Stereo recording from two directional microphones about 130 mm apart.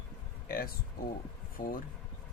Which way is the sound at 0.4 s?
90° left.